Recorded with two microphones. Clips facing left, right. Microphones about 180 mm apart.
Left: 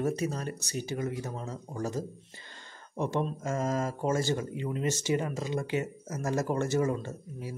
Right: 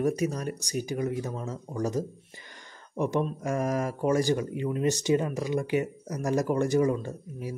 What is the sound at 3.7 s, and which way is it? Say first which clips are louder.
Speech: right 4 dB; 15° right (ahead or behind).